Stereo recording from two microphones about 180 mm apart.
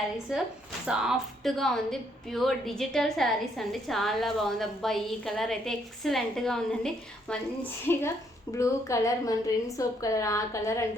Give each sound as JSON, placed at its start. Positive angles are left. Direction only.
{"t": 0.9, "sound": "a woman's voice", "side_deg": -5}